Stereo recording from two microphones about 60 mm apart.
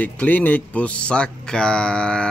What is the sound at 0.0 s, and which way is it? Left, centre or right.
Speech, left.